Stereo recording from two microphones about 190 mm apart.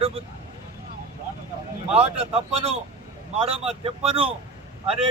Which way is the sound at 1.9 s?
35° right (ahead or behind).